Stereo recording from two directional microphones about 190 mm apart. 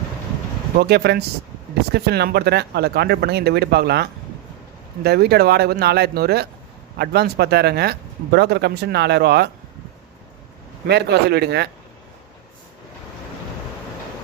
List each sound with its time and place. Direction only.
0.8 s speech: 60° right (ahead or behind)
10.8 s speech: 60° right (ahead or behind)